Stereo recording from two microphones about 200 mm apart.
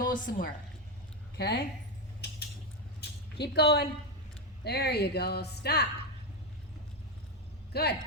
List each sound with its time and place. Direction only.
0.0 s a woman's voice: 45° left (ahead or behind)
1.4 s speech: 55° left (ahead or behind)
3.0 s a sound: 55° left (ahead or behind)
4.6 s speech: 55° left (ahead or behind)
7.7 s speech: 55° left (ahead or behind)